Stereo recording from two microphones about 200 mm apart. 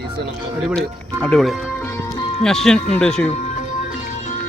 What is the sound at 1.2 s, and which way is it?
Music, centre (ahead or behind).